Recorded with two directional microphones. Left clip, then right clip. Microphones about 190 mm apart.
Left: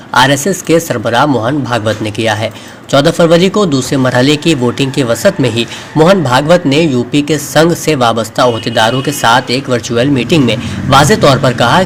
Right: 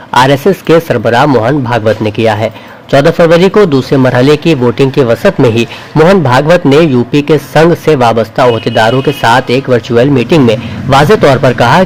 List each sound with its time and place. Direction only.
0.1 s a man's voice: 30° right (ahead or behind)